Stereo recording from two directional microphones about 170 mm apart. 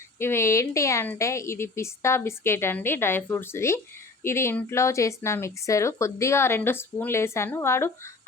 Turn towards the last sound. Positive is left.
turn(degrees=15)  # may be behind; listen again after turning